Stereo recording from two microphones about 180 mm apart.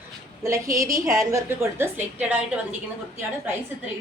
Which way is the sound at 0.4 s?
15° right (ahead or behind).